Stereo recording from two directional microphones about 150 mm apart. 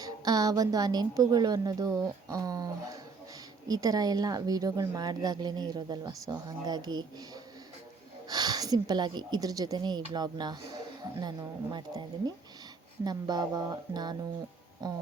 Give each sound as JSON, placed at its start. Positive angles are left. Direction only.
{"t": 0.0, "sound": "speech", "side_deg": -25}
{"t": 8.3, "sound": "speech", "side_deg": -25}